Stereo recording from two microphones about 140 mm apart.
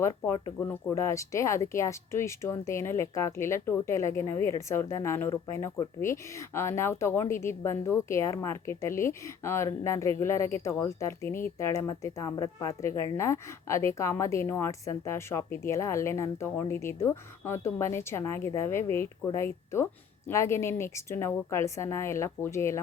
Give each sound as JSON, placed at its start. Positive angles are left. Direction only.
{"t": 0.0, "sound": "a woman's voice", "side_deg": 25}